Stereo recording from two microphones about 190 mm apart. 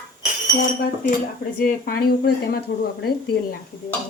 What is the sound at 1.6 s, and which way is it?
A woman's voice, 50° left (ahead or behind).